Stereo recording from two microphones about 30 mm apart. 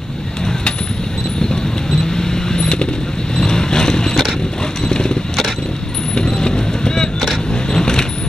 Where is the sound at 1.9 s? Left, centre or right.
Left.